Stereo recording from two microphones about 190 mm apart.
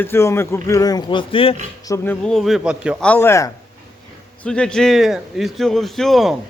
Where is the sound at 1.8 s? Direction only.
15° left (ahead or behind); by 3.0 s 5° right (ahead or behind).